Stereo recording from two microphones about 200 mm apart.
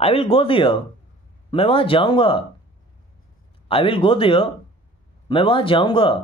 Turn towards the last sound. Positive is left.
turn(degrees=25)  # may be behind; listen again after turning